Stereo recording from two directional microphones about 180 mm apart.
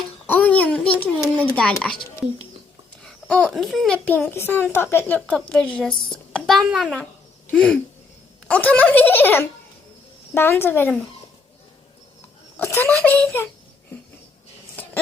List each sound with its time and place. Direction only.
0.3 s a sound: 10° left (ahead or behind)
3.0 s a child's voice: 5° left (ahead or behind)
5.9 s a woman's voice: 25° left (ahead or behind)
6.3 s a child's voice: centre (ahead or behind)
12.5 s speech: 10° left (ahead or behind)